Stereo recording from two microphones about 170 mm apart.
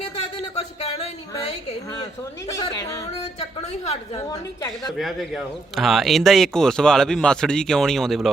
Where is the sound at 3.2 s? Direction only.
40° left (ahead or behind).